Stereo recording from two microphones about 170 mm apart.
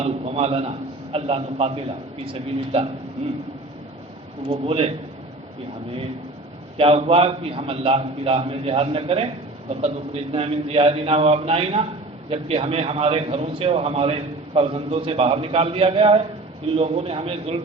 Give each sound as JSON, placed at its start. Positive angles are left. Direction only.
{"t": 0.0, "sound": "a sound", "side_deg": -40}
{"t": 1.1, "sound": "a man's voice", "side_deg": -35}
{"t": 4.4, "sound": "a man's voice", "side_deg": -35}
{"t": 6.7, "sound": "a man's voice", "side_deg": -35}